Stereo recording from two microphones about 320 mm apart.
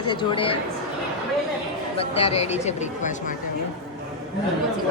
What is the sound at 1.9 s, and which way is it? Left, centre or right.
Speech, centre.